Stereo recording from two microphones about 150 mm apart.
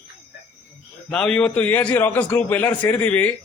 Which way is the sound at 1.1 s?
5° left (ahead or behind).